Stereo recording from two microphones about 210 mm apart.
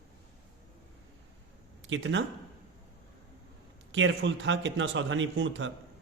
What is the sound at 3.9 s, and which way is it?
A man's voice, 65° right (ahead or behind).